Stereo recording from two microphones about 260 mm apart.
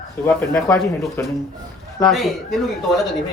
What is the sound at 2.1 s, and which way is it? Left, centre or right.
Speech, centre.